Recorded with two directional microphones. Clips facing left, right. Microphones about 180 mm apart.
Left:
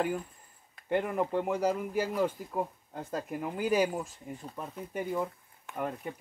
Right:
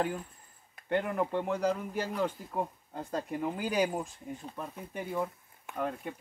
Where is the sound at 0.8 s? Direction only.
10° left (ahead or behind).